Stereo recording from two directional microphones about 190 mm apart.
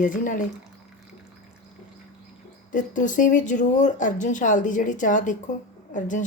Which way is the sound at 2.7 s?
45° left (ahead or behind).